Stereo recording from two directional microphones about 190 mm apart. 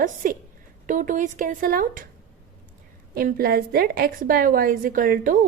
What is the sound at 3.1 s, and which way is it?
A woman's voice, 50° right (ahead or behind).